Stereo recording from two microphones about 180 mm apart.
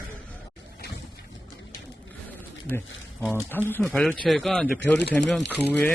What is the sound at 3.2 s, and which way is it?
A man's voice, 10° left (ahead or behind).